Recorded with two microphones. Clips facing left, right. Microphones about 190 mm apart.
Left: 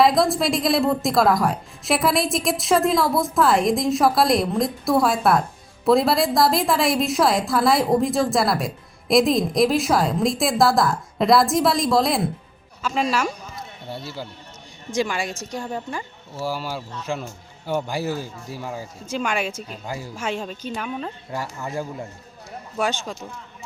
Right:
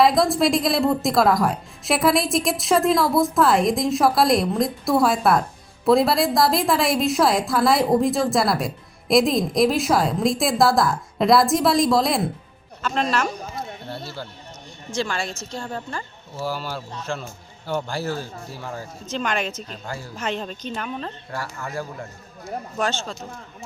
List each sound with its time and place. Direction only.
0.0 s a woman's voice: centre (ahead or behind)
14.9 s a woman's voice: 15° left (ahead or behind)
17.7 s speech: 15° left (ahead or behind)
21.3 s speech: 20° left (ahead or behind)